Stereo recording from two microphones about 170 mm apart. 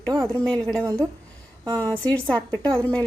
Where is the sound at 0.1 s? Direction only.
20° right (ahead or behind).